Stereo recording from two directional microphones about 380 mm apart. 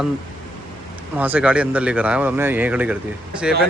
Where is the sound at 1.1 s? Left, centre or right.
Centre.